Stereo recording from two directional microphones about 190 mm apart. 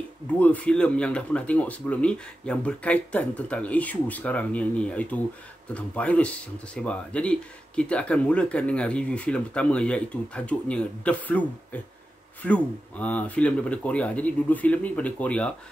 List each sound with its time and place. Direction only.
0.4 s speech: 5° left (ahead or behind)